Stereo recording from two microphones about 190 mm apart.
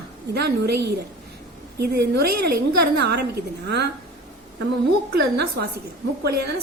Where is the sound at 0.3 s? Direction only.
60° right (ahead or behind).